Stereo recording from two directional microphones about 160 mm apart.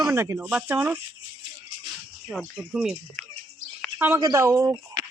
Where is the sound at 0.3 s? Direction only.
5° right (ahead or behind).